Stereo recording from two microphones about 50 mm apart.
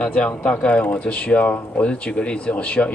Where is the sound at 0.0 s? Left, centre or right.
Centre.